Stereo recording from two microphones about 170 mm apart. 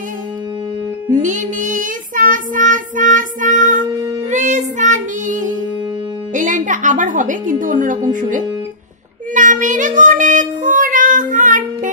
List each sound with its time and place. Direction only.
1.1 s child singing: 50° right (ahead or behind)
3.8 s music: 20° right (ahead or behind)
4.3 s music: 45° right (ahead or behind)
6.3 s a woman's voice: 50° right (ahead or behind)
9.3 s child singing: 50° right (ahead or behind)